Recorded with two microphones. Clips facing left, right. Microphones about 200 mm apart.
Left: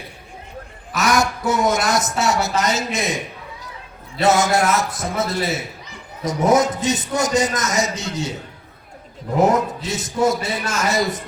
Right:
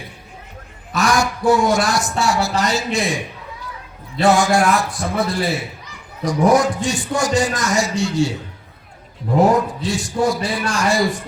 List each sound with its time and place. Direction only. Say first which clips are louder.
0.9 s speech: right 1 dB; 20° left (ahead or behind)
4.2 s speech: right 2 dB; 20° left (ahead or behind)
9.4 s speech: right 1 dB; 20° left (ahead or behind)